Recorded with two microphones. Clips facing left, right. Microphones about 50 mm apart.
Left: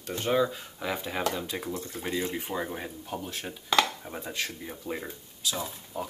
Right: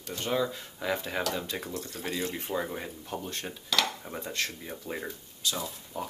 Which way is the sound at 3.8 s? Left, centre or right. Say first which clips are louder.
Even; centre.